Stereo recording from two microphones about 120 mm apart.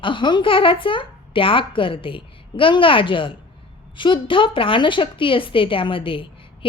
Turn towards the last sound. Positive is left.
turn(degrees=45)  # may be behind; listen again after turning